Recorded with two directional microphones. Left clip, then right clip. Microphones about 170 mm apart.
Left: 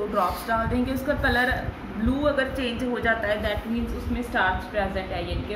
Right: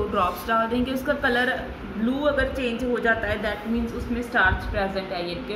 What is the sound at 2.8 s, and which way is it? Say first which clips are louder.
Speech: right 2 dB; 30° right (ahead or behind).